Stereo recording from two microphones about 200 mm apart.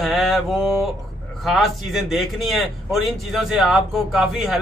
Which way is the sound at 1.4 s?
Centre (ahead or behind).